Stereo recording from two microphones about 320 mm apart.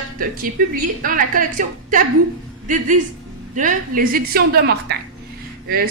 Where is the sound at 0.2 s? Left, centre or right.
Right.